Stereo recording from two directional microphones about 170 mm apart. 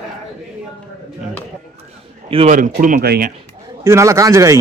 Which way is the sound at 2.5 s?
50° right (ahead or behind).